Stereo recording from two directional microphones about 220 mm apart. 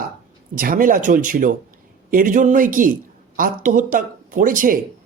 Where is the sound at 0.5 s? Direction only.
40° right (ahead or behind).